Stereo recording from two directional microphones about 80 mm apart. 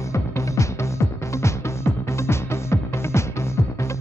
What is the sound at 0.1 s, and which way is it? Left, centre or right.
Music, left.